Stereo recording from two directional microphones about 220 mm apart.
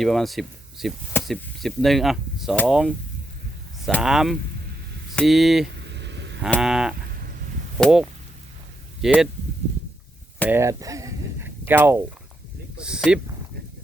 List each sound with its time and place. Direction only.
0.0 s speech: centre (ahead or behind)
5.7 s vehicle: 50° right (ahead or behind)
6.4 s speech: centre (ahead or behind)
10.5 s speech: 15° right (ahead or behind)